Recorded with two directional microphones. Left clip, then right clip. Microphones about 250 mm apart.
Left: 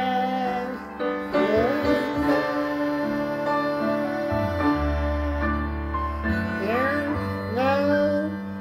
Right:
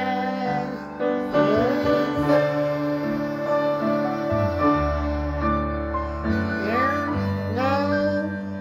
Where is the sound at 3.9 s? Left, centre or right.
Left.